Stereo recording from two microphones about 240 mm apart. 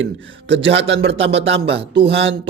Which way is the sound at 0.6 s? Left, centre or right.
Right.